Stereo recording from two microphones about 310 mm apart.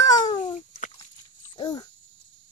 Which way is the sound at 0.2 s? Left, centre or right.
Left.